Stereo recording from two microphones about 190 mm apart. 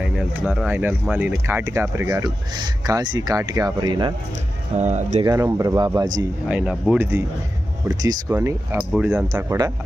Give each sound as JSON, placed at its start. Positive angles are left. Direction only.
{"t": 0.0, "sound": "speech", "side_deg": -5}
{"t": 4.8, "sound": "speech", "side_deg": -35}
{"t": 5.2, "sound": "speech", "side_deg": -15}
{"t": 6.5, "sound": "speech", "side_deg": -5}